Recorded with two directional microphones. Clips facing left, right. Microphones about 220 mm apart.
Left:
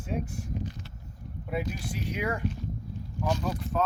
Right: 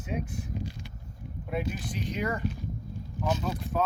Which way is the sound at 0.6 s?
10° right (ahead or behind).